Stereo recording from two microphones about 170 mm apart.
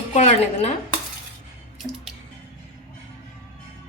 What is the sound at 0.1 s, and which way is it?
Speech, 40° left (ahead or behind).